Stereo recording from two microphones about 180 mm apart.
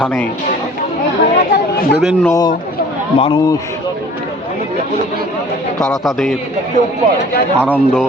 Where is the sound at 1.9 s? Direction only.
Centre (ahead or behind).